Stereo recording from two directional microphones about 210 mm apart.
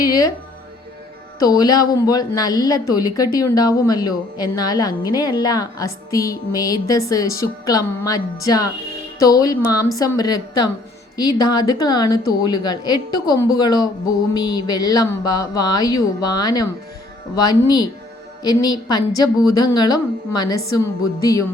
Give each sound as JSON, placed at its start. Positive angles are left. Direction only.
{"t": 0.0, "sound": "speech", "side_deg": 15}
{"t": 1.4, "sound": "a woman's voice", "side_deg": 20}